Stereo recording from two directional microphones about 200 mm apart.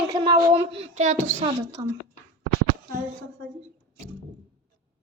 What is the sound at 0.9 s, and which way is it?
Speech, 35° right (ahead or behind).